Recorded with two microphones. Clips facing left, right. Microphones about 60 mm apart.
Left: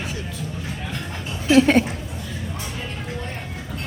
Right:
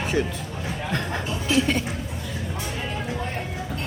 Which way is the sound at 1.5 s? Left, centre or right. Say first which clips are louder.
Left 8 dB; left.